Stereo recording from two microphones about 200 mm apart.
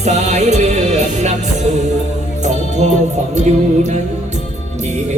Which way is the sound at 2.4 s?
35° right (ahead or behind).